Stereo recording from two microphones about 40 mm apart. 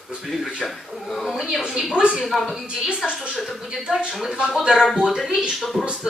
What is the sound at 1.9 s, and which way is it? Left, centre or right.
A woman's voice, right.